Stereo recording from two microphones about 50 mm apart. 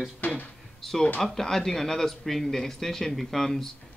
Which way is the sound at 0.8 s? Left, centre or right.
Centre.